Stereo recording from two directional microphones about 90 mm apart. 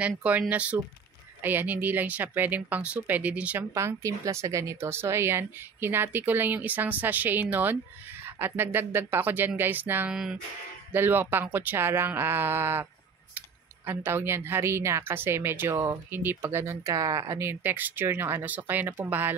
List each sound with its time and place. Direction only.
0.2 s speech: 15° right (ahead or behind)
3.7 s speech: 35° right (ahead or behind)
13.8 s speech: 25° right (ahead or behind); by 17.4 s 40° right (ahead or behind)
17.4 s speech: 25° right (ahead or behind)